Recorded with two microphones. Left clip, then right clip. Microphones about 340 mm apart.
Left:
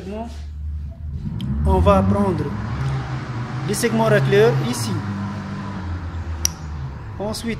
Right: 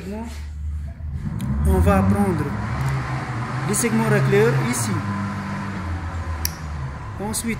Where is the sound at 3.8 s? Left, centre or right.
Left.